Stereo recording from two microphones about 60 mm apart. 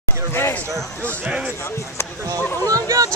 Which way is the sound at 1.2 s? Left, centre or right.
Right.